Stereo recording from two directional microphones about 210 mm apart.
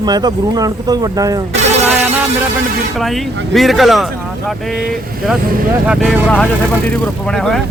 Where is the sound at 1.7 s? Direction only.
30° right (ahead or behind).